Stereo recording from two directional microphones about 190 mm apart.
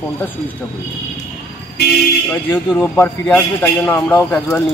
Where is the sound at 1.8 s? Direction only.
60° left (ahead or behind).